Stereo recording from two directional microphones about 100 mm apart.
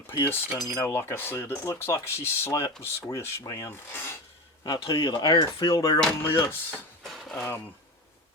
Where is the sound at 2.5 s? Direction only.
40° left (ahead or behind).